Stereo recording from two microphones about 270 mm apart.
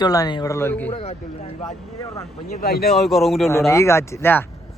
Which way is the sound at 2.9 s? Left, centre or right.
Centre.